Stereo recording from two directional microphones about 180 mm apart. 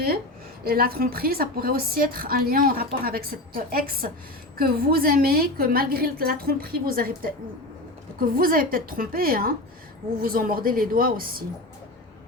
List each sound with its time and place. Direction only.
0.6 s a woman's voice: 55° right (ahead or behind)